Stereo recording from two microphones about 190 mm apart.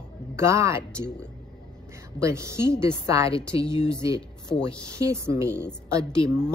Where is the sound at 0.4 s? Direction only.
15° right (ahead or behind).